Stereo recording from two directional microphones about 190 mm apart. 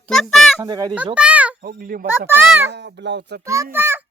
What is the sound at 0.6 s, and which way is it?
Speech, 20° right (ahead or behind).